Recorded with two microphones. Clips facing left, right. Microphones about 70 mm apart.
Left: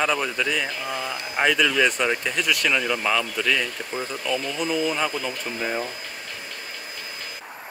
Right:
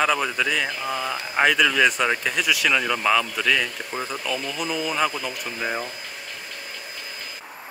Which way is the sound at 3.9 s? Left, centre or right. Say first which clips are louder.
Even; right.